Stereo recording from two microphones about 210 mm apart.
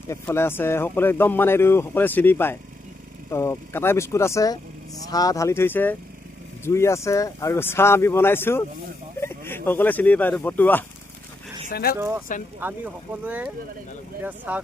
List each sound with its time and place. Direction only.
0.1 s speech: 10° left (ahead or behind)
11.7 s speech: 45° left (ahead or behind)
12.5 s speech: 10° right (ahead or behind)